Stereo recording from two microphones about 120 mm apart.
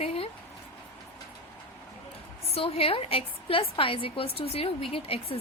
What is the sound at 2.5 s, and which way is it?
A woman's voice, 50° left (ahead or behind).